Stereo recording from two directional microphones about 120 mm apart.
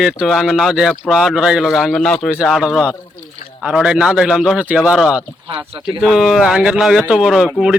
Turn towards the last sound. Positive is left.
turn(degrees=-5)  # may be behind; listen again after turning